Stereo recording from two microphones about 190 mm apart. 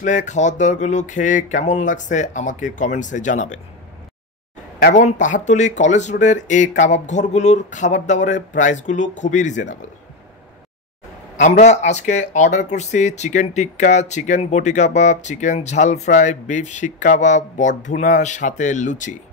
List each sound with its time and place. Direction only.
0.0 s speech: 40° left (ahead or behind)
4.8 s speech: 40° left (ahead or behind)
11.6 s speech: 35° left (ahead or behind)